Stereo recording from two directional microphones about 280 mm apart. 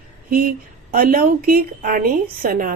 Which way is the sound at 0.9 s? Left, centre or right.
Right.